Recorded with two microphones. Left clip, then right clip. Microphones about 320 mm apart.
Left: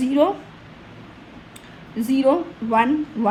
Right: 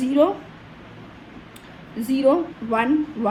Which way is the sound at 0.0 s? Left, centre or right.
Centre.